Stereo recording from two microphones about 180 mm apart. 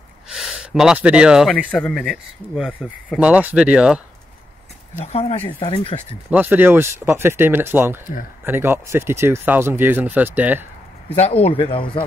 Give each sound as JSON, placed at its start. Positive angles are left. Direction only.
{"t": 0.3, "sound": "speech", "side_deg": 0}
{"t": 5.0, "sound": "speech", "side_deg": 35}
{"t": 6.3, "sound": "speech", "side_deg": -10}
{"t": 11.1, "sound": "speech", "side_deg": 35}